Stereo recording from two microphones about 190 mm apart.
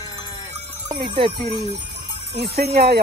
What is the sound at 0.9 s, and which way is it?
Speech, 25° right (ahead or behind).